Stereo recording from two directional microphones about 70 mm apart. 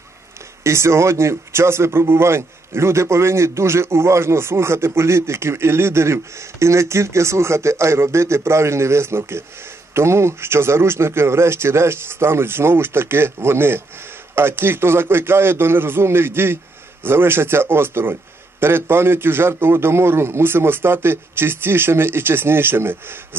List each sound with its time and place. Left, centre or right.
0.7 s speech: right